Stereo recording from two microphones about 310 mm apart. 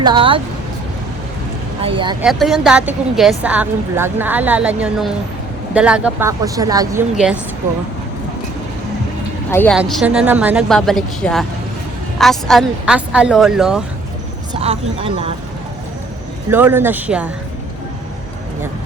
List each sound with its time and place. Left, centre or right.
0.0 s speech: centre
1.8 s speech: centre
2.2 s speech: centre
9.5 s speech: centre
14.6 s speech: centre
16.5 s speech: centre